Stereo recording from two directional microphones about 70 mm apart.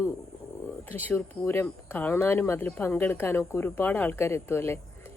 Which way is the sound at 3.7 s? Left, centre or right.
Left.